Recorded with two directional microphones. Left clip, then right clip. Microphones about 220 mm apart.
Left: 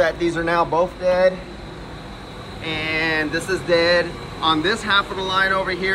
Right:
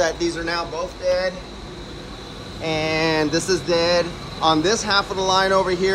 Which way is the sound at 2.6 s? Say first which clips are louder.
Right 1 dB; 25° right (ahead or behind).